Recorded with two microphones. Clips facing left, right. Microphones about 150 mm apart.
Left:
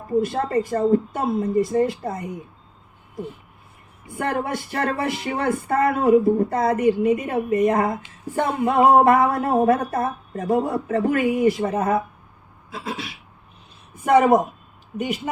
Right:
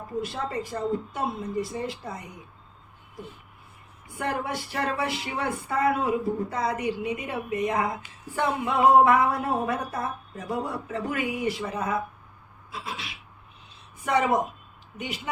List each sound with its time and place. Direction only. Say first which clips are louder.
0.2 s speech: left 9 dB; 55° left (ahead or behind)
4.2 s speech: left 5 dB; 50° left (ahead or behind)
14.0 s speech: left 8 dB; 50° left (ahead or behind)